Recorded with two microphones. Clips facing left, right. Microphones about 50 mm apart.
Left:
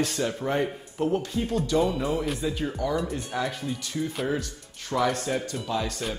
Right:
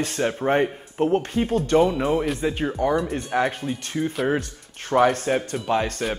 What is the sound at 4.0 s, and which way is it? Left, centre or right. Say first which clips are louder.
Speech: right 5 dB; right.